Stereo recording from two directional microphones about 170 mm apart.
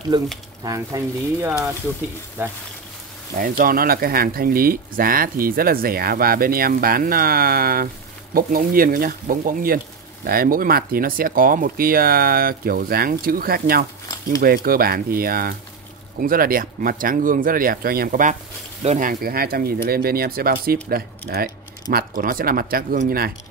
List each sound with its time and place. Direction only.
0.1 s speech: 25° right (ahead or behind)
3.3 s speech: 55° right (ahead or behind)
18.8 s speech: 45° right (ahead or behind)